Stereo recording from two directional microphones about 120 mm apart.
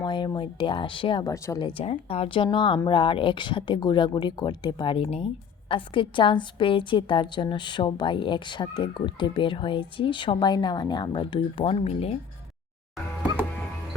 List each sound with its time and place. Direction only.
0.0 s a woman's voice: 40° left (ahead or behind)
1.2 s speech: 30° left (ahead or behind)
1.6 s a woman's voice: 50° left (ahead or behind)